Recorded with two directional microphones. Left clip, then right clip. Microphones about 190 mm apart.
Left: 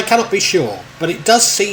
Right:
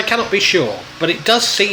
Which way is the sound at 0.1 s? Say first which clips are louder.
Left 1 dB; 30° left (ahead or behind).